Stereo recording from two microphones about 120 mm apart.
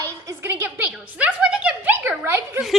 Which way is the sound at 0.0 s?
30° right (ahead or behind).